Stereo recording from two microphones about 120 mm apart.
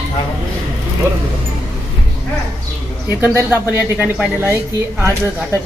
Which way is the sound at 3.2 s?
15° right (ahead or behind).